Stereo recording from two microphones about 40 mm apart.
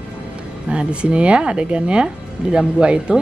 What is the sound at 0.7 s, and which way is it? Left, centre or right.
A woman's voice, right.